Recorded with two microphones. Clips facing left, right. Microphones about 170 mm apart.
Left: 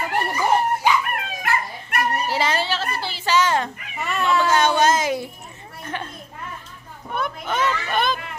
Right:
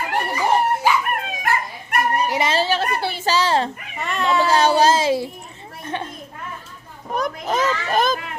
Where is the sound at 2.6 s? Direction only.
50° right (ahead or behind).